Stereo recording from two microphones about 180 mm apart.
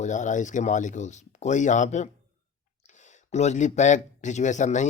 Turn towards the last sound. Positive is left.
turn(degrees=40)  # may be behind; listen again after turning